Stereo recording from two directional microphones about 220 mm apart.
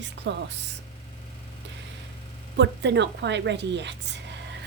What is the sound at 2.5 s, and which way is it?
A woman's voice, 50° right (ahead or behind).